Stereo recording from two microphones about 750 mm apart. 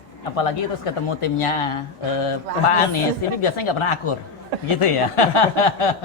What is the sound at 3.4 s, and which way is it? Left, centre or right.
Speech, left.